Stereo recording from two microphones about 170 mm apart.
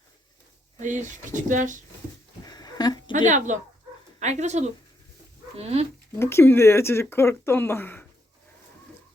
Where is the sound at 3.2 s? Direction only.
45° right (ahead or behind).